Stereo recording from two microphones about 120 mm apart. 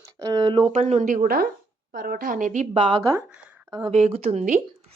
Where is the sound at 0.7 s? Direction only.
75° right (ahead or behind).